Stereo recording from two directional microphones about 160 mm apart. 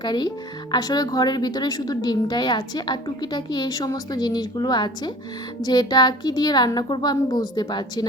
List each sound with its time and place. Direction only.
0.0 s speech: 25° left (ahead or behind)